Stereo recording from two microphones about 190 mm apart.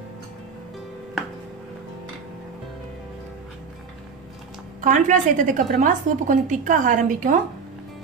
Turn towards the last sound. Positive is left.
turn(degrees=-40)  # may be behind; listen again after turning